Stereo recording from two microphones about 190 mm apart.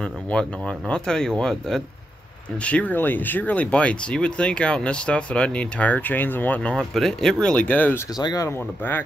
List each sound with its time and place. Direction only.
0.0 s speech: 5° left (ahead or behind)
8.2 s speech: 20° left (ahead or behind)